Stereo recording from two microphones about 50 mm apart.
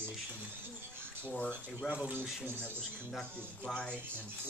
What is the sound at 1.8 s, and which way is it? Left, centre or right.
Speech, centre.